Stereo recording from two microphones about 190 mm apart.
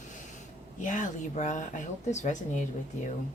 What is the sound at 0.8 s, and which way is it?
Speech, 40° left (ahead or behind).